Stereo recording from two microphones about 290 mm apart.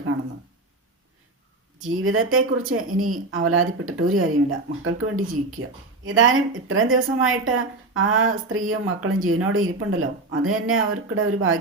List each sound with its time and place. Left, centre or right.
1.8 s speech: right